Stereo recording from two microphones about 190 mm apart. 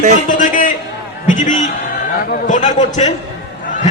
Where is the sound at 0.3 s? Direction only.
45° left (ahead or behind).